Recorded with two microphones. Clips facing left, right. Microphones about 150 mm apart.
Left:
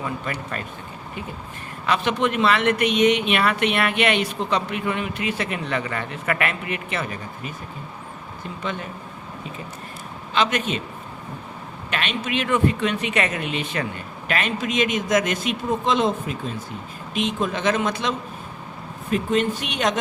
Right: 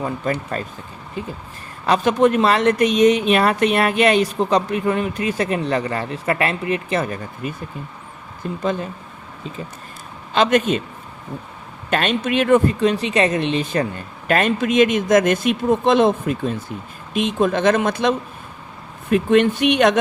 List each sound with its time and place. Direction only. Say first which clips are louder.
0.5 s speech: right 5 dB; 35° right (ahead or behind)
1.9 s speech: right 6 dB; 40° right (ahead or behind)
10.3 s speech: right 6 dB; 45° right (ahead or behind)
11.9 s speech: right 7 dB; 45° right (ahead or behind)
14.3 s speech: right 7 dB; 45° right (ahead or behind)
19.1 s speech: right 6 dB; 65° right (ahead or behind)